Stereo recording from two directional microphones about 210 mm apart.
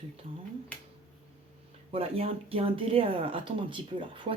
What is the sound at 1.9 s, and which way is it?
Speech, 30° right (ahead or behind).